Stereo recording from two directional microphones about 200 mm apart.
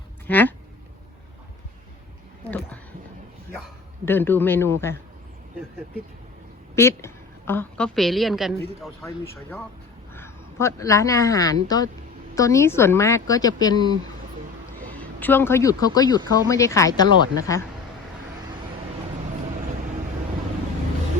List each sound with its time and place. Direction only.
0.3 s speech: 10° left (ahead or behind)
4.0 s speech: 10° left (ahead or behind)
6.7 s a woman's voice: 15° left (ahead or behind)
9.0 s speech: 15° left (ahead or behind)
14.9 s speech: 10° left (ahead or behind)